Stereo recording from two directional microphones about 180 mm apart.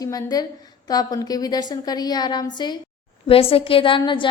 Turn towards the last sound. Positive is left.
turn(degrees=30)  # may be behind; listen again after turning